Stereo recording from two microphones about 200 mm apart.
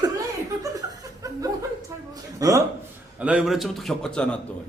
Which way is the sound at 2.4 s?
15° right (ahead or behind).